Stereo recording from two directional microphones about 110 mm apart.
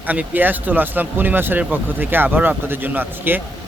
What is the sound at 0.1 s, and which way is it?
Speech, 15° right (ahead or behind).